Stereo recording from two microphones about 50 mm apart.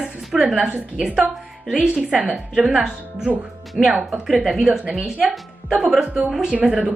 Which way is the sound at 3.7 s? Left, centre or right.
Centre.